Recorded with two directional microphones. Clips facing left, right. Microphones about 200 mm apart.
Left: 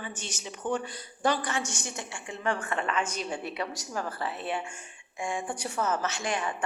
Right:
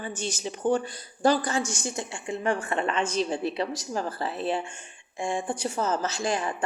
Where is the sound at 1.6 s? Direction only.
90° right.